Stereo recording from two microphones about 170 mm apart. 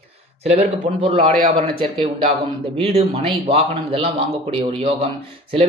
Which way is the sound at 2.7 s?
35° right (ahead or behind).